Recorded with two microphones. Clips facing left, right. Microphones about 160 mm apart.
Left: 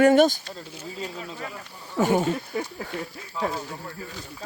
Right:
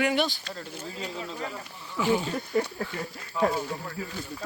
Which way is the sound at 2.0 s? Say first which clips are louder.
Left 4 dB; 45° left (ahead or behind).